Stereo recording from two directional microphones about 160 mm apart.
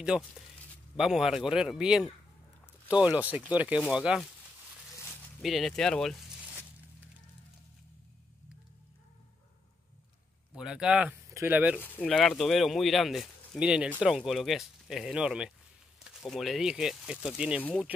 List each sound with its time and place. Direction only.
0.1 s speech: 25° left (ahead or behind)
0.9 s speech: 5° right (ahead or behind)
5.4 s speech: centre (ahead or behind)
10.5 s speech: 5° right (ahead or behind)
11.8 s speech: 10° left (ahead or behind); by 17.6 s 5° right (ahead or behind)
17.6 s speech: 10° left (ahead or behind)